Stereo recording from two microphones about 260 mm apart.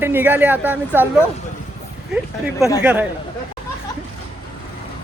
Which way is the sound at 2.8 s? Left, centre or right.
Centre.